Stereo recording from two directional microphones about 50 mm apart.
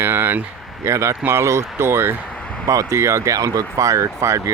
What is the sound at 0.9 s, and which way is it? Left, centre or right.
Speech, right.